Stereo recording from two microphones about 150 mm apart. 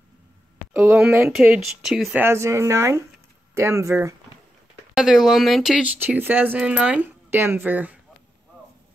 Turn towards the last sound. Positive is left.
turn(degrees=-10)  # may be behind; listen again after turning